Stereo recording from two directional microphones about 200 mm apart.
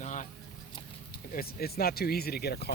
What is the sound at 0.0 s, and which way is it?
Vehicle, 40° left (ahead or behind).